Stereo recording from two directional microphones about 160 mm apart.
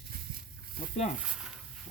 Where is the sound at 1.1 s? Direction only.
5° right (ahead or behind).